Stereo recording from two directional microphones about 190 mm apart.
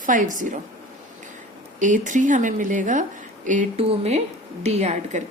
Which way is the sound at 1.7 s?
40° right (ahead or behind).